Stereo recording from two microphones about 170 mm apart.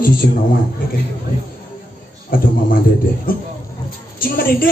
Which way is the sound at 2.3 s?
55° left (ahead or behind).